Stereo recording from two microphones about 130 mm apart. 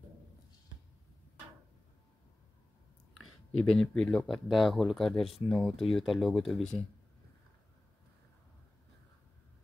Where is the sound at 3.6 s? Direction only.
5° left (ahead or behind).